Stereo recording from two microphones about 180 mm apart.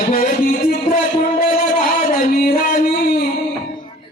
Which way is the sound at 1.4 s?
50° left (ahead or behind).